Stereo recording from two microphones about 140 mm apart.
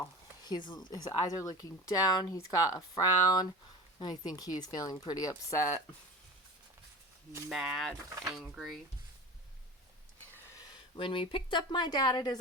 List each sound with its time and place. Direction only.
0.0 s a sound: 30° left (ahead or behind)
0.7 s speech: 30° left (ahead or behind)
7.5 s speech: 5° right (ahead or behind)
10.9 s speech: 35° left (ahead or behind)